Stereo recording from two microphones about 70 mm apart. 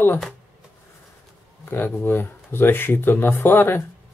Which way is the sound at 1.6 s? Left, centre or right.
Left.